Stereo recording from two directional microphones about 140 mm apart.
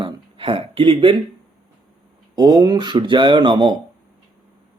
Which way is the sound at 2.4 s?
30° right (ahead or behind).